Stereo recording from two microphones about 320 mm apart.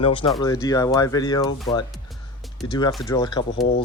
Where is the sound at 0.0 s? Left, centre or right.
Centre.